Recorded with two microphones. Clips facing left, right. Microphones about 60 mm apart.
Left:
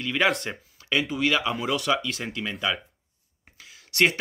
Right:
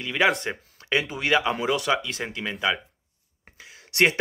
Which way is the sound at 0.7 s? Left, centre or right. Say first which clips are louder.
Even; right.